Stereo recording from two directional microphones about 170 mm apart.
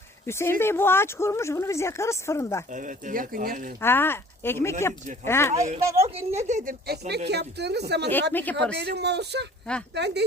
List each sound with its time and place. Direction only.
0.3 s speech: 15° left (ahead or behind)
2.7 s speech: 50° right (ahead or behind)
3.8 s speech: 15° left (ahead or behind)
5.5 s a woman's voice: 45° right (ahead or behind)
6.7 s a woman's voice: 70° right (ahead or behind)
8.3 s speech: 10° left (ahead or behind)
8.7 s speech: 80° right